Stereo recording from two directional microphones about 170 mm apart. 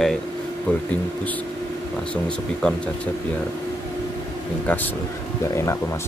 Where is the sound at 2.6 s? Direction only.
5° left (ahead or behind).